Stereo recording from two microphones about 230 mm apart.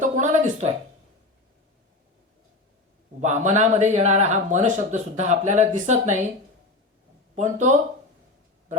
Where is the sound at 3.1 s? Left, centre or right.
Right.